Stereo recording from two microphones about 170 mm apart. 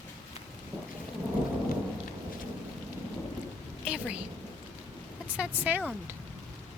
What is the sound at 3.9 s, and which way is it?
Rain, 5° right (ahead or behind).